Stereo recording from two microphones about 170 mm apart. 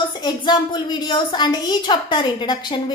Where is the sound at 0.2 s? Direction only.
25° left (ahead or behind).